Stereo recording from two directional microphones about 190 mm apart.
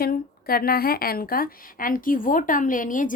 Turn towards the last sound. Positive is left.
turn(degrees=45)  # may be behind; listen again after turning